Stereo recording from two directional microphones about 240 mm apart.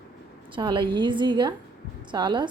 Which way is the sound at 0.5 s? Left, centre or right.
Right.